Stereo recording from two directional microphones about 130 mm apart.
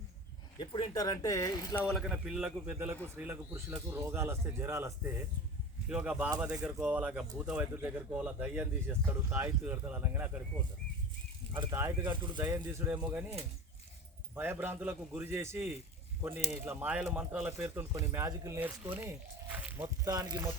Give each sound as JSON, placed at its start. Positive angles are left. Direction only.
{"t": 0.6, "sound": "speech", "side_deg": 35}
{"t": 1.9, "sound": "speech", "side_deg": 0}
{"t": 2.7, "sound": "speech", "side_deg": -20}
{"t": 5.9, "sound": "speech", "side_deg": -10}
{"t": 11.7, "sound": "speech", "side_deg": -20}
{"t": 14.3, "sound": "speech", "side_deg": -15}
{"t": 20.1, "sound": "speech", "side_deg": -30}